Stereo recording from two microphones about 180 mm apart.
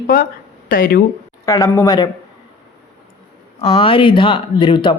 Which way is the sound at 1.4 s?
20° left (ahead or behind).